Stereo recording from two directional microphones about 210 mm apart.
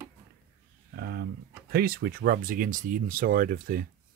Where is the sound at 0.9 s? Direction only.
50° right (ahead or behind).